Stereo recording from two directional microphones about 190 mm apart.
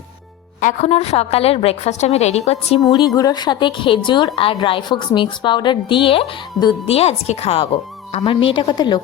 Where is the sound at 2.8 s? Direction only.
20° left (ahead or behind).